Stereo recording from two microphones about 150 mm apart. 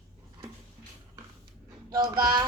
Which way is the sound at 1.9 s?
30° right (ahead or behind).